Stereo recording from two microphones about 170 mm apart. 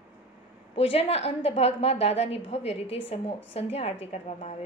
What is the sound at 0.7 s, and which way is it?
A woman's voice, 35° left (ahead or behind).